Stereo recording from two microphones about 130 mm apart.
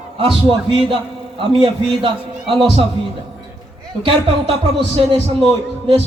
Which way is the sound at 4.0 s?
45° right (ahead or behind).